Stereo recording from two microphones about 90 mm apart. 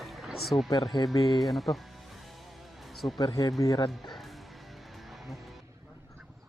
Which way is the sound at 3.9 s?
Centre (ahead or behind).